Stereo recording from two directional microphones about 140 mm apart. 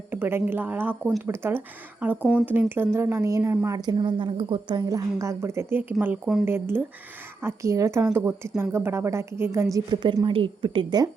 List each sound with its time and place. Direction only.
0.1 s speech: 15° right (ahead or behind)
3.8 s a woman's voice: 35° right (ahead or behind)
9.7 s a woman's voice: 30° right (ahead or behind)